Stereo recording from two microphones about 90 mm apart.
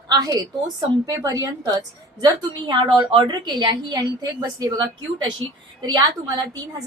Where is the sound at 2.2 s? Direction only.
55° right (ahead or behind).